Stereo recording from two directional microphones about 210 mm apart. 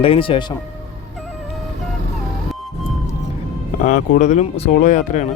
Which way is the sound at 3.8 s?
35° left (ahead or behind).